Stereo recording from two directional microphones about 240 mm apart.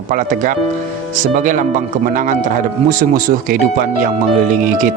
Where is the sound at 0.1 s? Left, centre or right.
Right.